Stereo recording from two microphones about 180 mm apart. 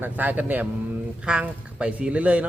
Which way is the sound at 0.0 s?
10° right (ahead or behind).